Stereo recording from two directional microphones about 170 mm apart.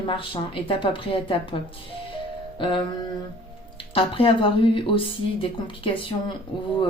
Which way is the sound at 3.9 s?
30° left (ahead or behind).